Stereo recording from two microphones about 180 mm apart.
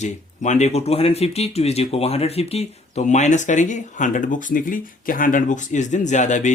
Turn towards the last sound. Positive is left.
turn(degrees=40)  # may be behind; listen again after turning